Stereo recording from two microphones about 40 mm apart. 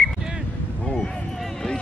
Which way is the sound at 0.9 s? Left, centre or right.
Centre.